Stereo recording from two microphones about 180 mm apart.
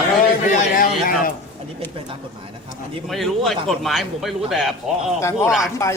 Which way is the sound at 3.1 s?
Centre (ahead or behind).